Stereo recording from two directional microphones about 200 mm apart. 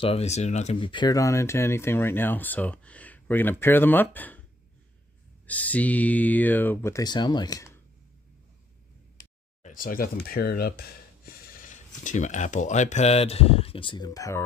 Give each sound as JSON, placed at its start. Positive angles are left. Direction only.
{"t": 0.0, "sound": "speech", "side_deg": 30}
{"t": 5.5, "sound": "speech", "side_deg": 5}
{"t": 9.6, "sound": "a sound", "side_deg": 40}
{"t": 10.2, "sound": "speech", "side_deg": 45}